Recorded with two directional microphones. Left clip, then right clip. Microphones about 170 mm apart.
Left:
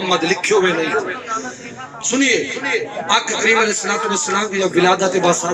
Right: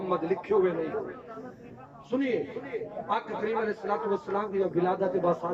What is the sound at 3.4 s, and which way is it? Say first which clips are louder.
Speech: left 15 dB; 20° right (ahead or behind).